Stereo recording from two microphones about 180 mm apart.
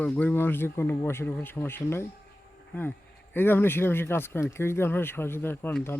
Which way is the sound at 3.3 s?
10° left (ahead or behind).